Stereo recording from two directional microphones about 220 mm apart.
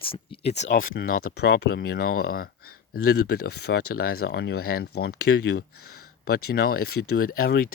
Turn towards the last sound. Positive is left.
turn(degrees=40)  # may be behind; listen again after turning